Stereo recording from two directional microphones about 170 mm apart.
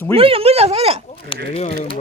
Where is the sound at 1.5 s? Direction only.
40° left (ahead or behind).